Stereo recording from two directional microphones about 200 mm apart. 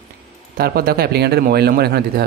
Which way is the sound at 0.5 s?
50° right (ahead or behind).